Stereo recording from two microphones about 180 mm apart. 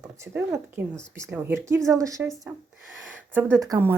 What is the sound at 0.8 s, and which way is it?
Speech, 10° right (ahead or behind).